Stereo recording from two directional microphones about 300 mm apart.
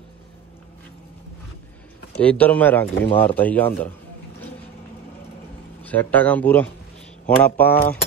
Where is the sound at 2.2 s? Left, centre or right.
Centre.